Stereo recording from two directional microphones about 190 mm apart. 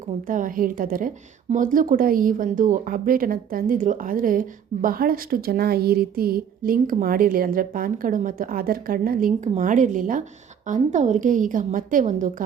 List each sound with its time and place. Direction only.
0.3 s a woman's voice: 45° right (ahead or behind)